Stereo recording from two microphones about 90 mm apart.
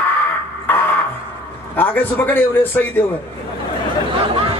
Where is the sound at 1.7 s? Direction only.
20° left (ahead or behind).